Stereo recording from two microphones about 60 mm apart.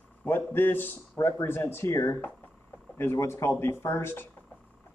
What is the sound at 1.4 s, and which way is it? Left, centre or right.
Speech, left.